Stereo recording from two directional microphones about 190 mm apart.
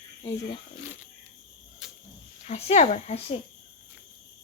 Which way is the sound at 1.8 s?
Centre (ahead or behind).